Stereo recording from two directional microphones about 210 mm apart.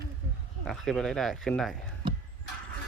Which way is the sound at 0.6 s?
Centre (ahead or behind).